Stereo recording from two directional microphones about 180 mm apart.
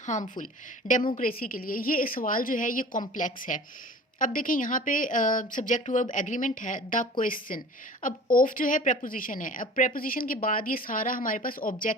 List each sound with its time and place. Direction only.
0.0 s a woman's voice: 45° left (ahead or behind)